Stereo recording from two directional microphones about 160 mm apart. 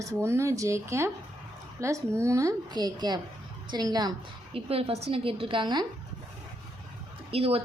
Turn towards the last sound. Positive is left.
turn(degrees=-35)  # may be behind; listen again after turning